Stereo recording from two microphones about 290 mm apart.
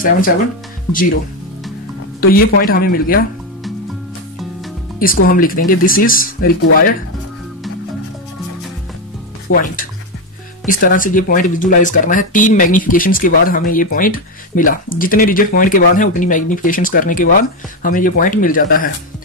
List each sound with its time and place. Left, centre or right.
2.1 s speech: left
4.9 s speech: left
9.5 s speech: left
10.7 s speech: left